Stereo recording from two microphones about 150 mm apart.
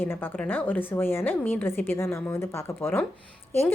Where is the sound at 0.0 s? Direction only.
15° left (ahead or behind).